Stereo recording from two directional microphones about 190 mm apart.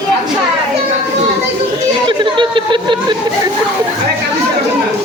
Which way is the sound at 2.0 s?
25° right (ahead or behind).